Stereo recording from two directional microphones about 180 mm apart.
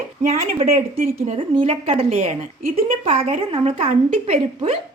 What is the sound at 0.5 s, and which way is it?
Speech, 35° right (ahead or behind).